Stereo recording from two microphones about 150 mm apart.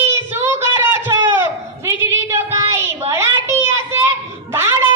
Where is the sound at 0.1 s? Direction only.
15° right (ahead or behind).